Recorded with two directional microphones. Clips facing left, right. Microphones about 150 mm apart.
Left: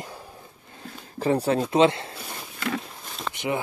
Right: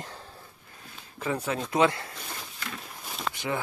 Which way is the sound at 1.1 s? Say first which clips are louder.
Left 8 dB; 35° left (ahead or behind).